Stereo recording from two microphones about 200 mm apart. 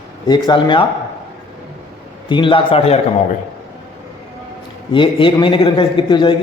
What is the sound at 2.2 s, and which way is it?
Speech, 25° left (ahead or behind).